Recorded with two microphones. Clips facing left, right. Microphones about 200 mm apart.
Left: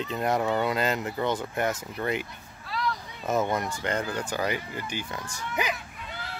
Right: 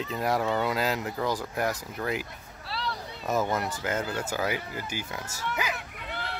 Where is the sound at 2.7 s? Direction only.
35° right (ahead or behind).